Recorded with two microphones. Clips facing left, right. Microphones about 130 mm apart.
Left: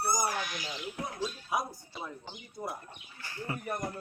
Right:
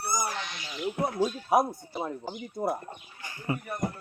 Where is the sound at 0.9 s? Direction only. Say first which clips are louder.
Right 11 dB; 60° right (ahead or behind).